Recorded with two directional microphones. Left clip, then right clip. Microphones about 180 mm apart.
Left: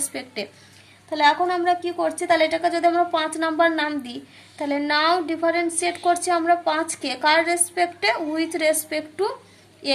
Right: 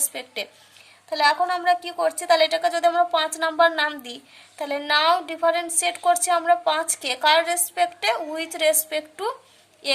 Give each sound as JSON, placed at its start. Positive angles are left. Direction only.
{"t": 0.0, "sound": "a woman's voice", "side_deg": -35}